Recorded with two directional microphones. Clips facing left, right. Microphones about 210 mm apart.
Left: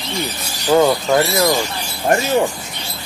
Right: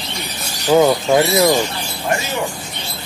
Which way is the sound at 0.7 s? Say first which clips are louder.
Right 1 dB; 10° right (ahead or behind).